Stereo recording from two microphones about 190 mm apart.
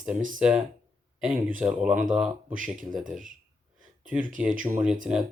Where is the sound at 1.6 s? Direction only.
5° right (ahead or behind).